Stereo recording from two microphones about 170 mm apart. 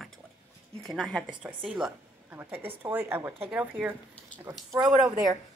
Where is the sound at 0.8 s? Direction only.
Centre (ahead or behind).